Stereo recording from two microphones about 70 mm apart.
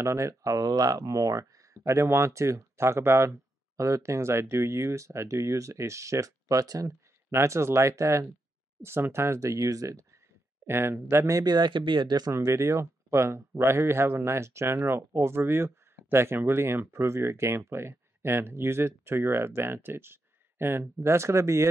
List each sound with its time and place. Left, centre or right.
0.0 s speech: right
7.2 s speech: right
10.7 s speech: right
11.2 s speech: right
11.5 s speech: right
12.3 s speech: right